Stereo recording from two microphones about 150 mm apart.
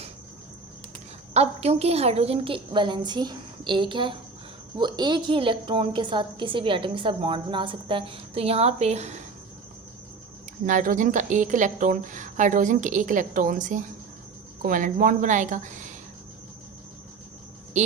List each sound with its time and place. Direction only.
1.3 s a woman's voice: 45° right (ahead or behind)
10.7 s a woman's voice: 60° right (ahead or behind)
17.7 s cricket: 50° right (ahead or behind)